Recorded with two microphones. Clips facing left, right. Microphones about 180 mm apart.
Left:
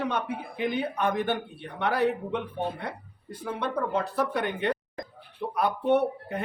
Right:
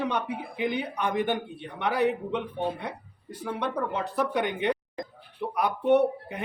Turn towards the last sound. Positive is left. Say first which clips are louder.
# right 2 dB
turn(degrees=-15)  # may be behind; listen again after turning